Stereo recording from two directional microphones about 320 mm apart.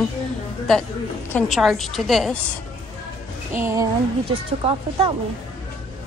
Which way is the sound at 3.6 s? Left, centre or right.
Centre.